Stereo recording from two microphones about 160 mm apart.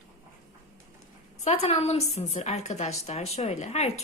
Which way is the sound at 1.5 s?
40° left (ahead or behind).